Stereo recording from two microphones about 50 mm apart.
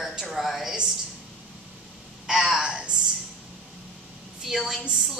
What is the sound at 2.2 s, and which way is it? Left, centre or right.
Speech, centre.